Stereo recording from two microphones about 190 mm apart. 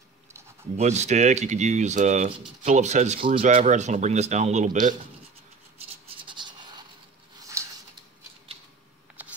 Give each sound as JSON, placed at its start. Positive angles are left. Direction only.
{"t": 0.7, "sound": "speech", "side_deg": -35}
{"t": 6.2, "sound": "scratch", "side_deg": -25}
{"t": 7.6, "sound": "a sound", "side_deg": -15}